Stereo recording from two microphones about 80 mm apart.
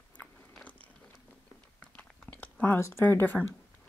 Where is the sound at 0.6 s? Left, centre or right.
Centre.